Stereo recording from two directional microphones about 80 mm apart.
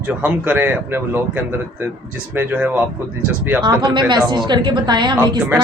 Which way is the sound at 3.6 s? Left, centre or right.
Right.